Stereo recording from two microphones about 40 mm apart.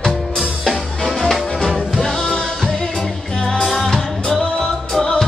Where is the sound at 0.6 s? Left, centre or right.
Centre.